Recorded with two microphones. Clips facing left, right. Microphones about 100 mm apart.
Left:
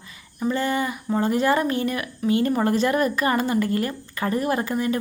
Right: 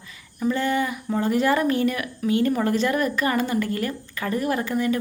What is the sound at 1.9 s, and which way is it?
Speech, 35° left (ahead or behind).